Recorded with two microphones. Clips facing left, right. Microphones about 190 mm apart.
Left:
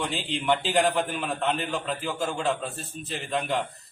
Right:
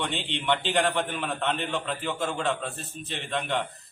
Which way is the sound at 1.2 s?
Centre (ahead or behind).